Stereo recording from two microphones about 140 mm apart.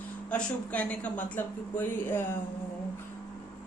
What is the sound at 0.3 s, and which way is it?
A woman's voice, 10° left (ahead or behind).